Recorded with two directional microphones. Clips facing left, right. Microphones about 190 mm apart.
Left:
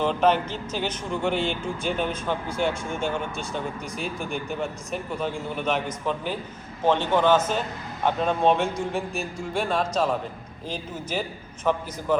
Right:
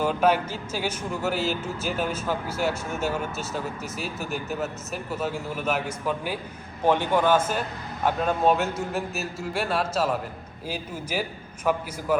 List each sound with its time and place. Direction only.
0.0 s speech: 10° right (ahead or behind)